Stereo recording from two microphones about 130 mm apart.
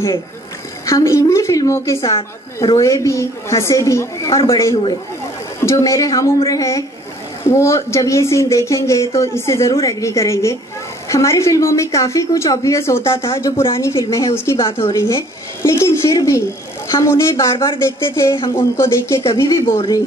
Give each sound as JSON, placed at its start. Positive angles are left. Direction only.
{"t": 0.8, "sound": "speech", "side_deg": 25}
{"t": 14.6, "sound": "a woman's voice", "side_deg": 40}
{"t": 15.0, "sound": "speech", "side_deg": 20}